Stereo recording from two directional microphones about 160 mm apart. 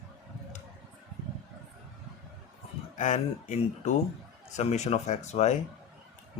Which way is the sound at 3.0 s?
45° left (ahead or behind).